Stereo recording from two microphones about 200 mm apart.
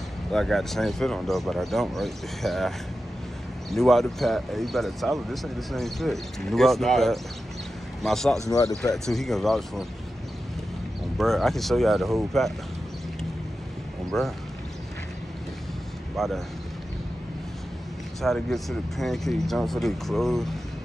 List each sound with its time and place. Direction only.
0.3 s speech: centre (ahead or behind)
3.7 s speech: centre (ahead or behind)
8.5 s speech: 15° left (ahead or behind)
8.9 s speech: centre (ahead or behind)
11.1 s speech: centre (ahead or behind)
14.1 s speech: centre (ahead or behind)
16.2 s speech: centre (ahead or behind)
18.2 s speech: centre (ahead or behind)